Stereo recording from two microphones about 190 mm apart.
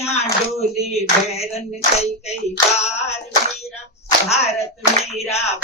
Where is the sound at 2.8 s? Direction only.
35° left (ahead or behind).